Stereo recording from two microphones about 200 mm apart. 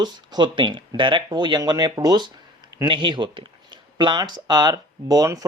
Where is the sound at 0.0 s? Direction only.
20° right (ahead or behind).